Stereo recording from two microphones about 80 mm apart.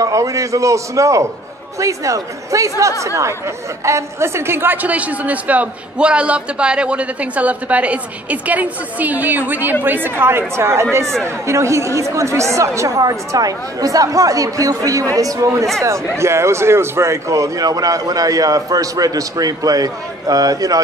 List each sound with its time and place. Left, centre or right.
0.0 s speech: right
4.8 s a man's voice: centre; by 20.8 s right